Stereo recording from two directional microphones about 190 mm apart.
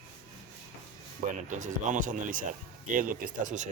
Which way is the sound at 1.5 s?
40° right (ahead or behind).